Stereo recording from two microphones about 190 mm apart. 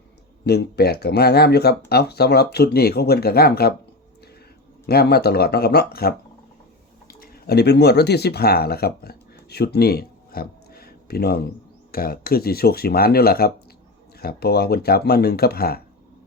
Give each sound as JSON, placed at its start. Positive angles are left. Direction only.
{"t": 0.4, "sound": "speech", "side_deg": 60}
{"t": 4.9, "sound": "speech", "side_deg": 55}